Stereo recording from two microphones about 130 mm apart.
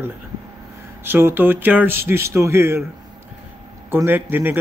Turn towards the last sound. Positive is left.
turn(degrees=-15)  # may be behind; listen again after turning